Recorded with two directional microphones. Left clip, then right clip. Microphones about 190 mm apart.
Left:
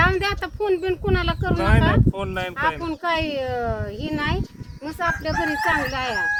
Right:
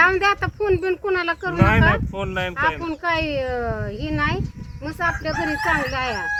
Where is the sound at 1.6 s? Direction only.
15° right (ahead or behind).